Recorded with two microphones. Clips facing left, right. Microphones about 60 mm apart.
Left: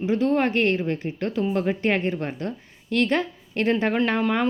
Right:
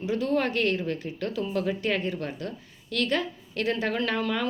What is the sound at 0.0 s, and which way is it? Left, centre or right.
Speech, left.